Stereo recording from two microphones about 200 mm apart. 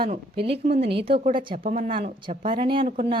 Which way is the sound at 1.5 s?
40° right (ahead or behind).